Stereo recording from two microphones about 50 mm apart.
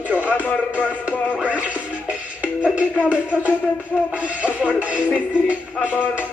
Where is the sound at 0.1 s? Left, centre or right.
Right.